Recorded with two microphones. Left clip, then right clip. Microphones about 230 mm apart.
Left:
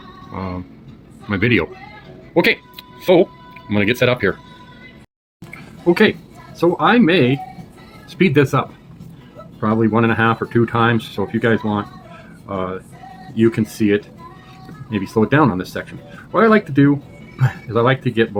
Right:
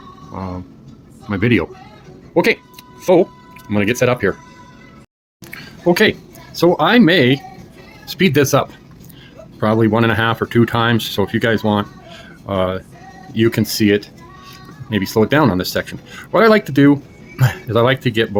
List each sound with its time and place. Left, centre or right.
0.3 s speech: centre
5.5 s a sound: right
6.6 s speech: right